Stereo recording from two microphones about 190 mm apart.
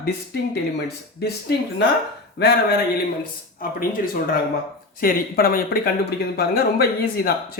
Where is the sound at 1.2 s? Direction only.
60° left (ahead or behind).